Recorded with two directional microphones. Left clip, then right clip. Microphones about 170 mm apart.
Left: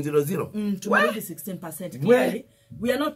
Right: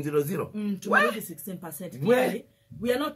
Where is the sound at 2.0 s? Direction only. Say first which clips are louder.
Left 3 dB; 40° right (ahead or behind).